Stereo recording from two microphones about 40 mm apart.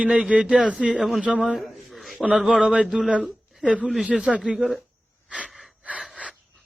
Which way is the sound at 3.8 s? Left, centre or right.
Centre.